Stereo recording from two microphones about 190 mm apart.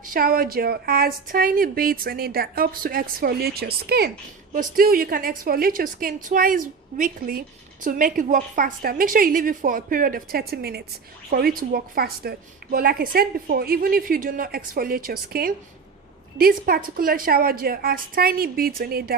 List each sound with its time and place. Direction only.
0.0 s a woman's voice: 50° right (ahead or behind)